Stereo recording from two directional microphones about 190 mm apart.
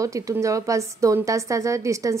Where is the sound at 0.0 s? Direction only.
15° right (ahead or behind).